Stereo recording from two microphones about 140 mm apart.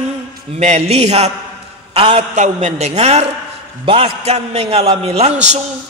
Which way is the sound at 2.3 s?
55° right (ahead or behind).